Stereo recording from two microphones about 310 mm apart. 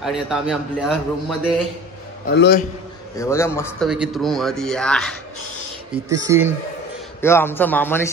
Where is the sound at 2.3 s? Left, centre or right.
Left.